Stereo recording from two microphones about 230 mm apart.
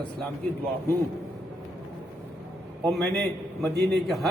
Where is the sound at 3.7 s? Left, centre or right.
Right.